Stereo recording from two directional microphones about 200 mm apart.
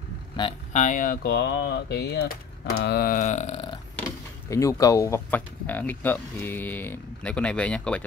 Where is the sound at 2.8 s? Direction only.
50° left (ahead or behind); by 3.7 s 30° left (ahead or behind).